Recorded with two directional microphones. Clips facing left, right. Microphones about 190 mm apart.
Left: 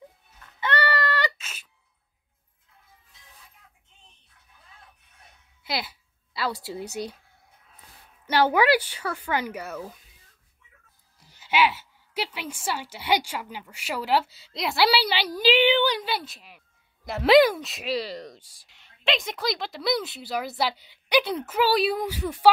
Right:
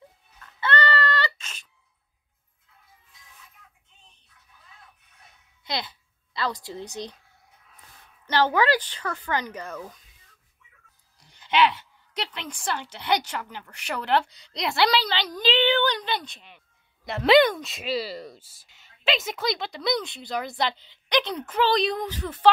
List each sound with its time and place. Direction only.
0.6 s a sound: 10° left (ahead or behind)
5.6 s speech: 5° left (ahead or behind)
8.3 s a woman's voice: 10° left (ahead or behind)
11.1 s a woman's voice: 5° left (ahead or behind)